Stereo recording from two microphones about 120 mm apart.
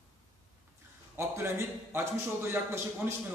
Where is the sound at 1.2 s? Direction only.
20° right (ahead or behind).